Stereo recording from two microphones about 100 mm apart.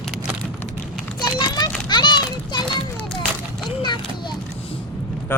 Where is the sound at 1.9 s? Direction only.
50° left (ahead or behind).